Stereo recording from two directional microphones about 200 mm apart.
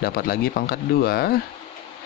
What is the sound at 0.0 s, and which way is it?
Speech, 50° left (ahead or behind).